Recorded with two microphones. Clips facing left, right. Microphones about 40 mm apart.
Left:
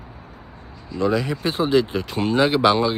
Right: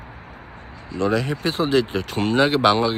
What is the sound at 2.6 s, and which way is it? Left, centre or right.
Speech, right.